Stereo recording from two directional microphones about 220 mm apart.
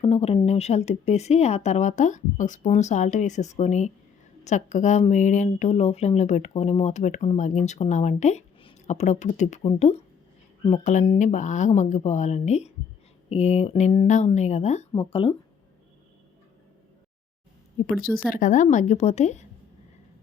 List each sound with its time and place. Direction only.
0.0 s speech: 25° left (ahead or behind)
17.8 s speech: 35° left (ahead or behind)